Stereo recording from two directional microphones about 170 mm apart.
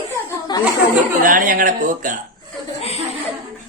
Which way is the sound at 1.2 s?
55° right (ahead or behind).